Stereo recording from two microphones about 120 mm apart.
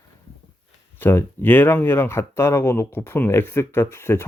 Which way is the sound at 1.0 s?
15° left (ahead or behind).